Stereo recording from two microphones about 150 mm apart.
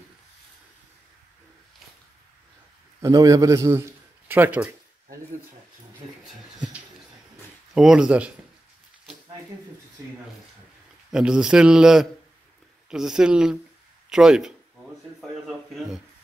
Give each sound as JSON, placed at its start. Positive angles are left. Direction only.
{"t": 3.0, "sound": "a man's voice", "side_deg": -25}
{"t": 7.7, "sound": "a man's voice", "side_deg": -5}
{"t": 11.1, "sound": "a man's voice", "side_deg": -5}
{"t": 15.1, "sound": "a sound", "side_deg": 0}